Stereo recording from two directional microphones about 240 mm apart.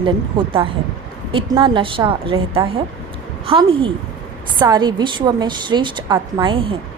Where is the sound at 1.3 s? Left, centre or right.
Centre.